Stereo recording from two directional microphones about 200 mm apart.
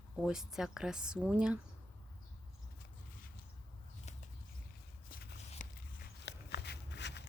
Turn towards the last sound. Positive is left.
turn(degrees=60)  # may be behind; listen again after turning